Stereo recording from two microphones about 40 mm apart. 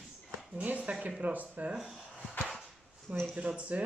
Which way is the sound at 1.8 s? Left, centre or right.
Centre.